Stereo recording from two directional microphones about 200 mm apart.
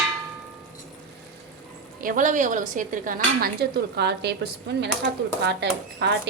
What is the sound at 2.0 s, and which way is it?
Cutlery, 40° right (ahead or behind).